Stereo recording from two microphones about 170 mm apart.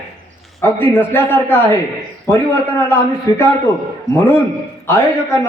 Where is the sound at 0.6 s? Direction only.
10° left (ahead or behind).